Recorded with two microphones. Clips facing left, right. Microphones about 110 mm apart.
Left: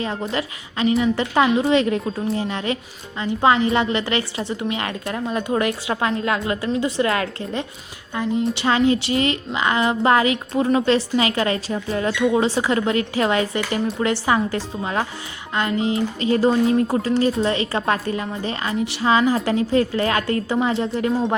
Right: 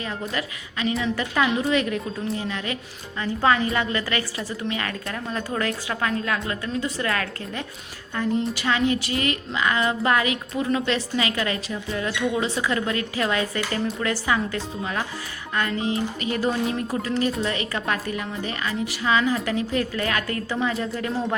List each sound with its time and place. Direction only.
0.0 s a woman's voice: 30° left (ahead or behind)
8.5 s a woman's voice: 30° left (ahead or behind)